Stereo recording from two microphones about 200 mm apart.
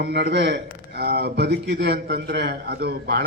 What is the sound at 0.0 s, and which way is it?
A man's voice, 55° right (ahead or behind).